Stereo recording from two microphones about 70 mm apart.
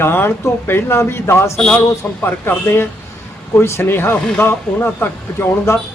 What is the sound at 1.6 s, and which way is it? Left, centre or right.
Speech, centre.